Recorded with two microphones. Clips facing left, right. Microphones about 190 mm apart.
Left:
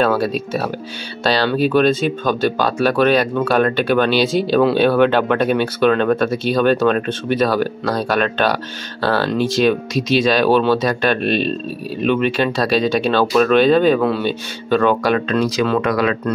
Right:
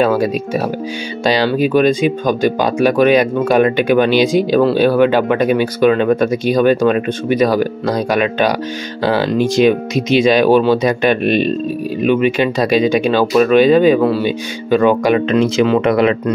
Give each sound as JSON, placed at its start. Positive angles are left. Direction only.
{"t": 0.0, "sound": "speech", "side_deg": -15}